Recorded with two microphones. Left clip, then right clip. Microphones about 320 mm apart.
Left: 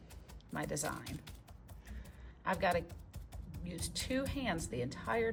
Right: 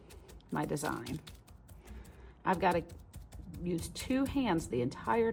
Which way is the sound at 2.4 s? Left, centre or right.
Centre.